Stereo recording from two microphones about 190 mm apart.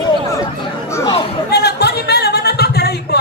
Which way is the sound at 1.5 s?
60° left (ahead or behind).